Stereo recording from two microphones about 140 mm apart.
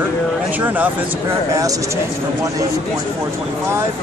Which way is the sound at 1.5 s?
25° right (ahead or behind).